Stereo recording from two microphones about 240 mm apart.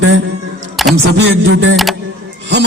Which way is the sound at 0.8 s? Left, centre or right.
Centre.